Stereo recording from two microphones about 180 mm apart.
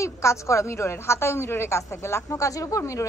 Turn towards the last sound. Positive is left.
turn(degrees=15)  # may be behind; listen again after turning